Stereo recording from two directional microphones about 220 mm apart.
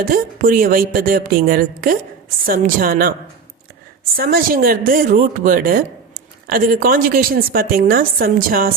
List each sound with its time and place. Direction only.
0.0 s a woman's voice: 40° right (ahead or behind)
4.2 s a woman's voice: 40° right (ahead or behind)